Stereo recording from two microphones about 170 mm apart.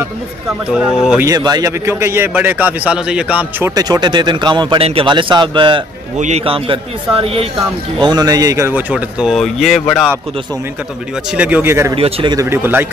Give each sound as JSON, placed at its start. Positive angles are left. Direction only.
{"t": 0.7, "sound": "speech", "side_deg": -5}
{"t": 1.2, "sound": "a man's voice", "side_deg": -20}
{"t": 6.1, "sound": "a man's voice", "side_deg": -40}
{"t": 8.0, "sound": "a man's voice", "side_deg": -25}
{"t": 8.9, "sound": "speech", "side_deg": 0}
{"t": 11.3, "sound": "speech", "side_deg": -10}
{"t": 11.9, "sound": "a man's voice", "side_deg": -30}
{"t": 12.4, "sound": "speech", "side_deg": -15}